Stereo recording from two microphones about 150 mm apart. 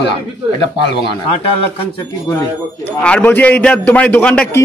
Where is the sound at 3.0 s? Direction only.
10° left (ahead or behind).